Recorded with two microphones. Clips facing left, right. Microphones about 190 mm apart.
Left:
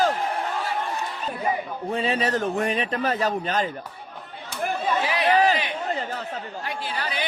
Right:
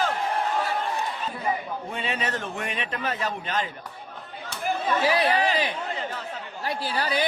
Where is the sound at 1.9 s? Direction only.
35° left (ahead or behind).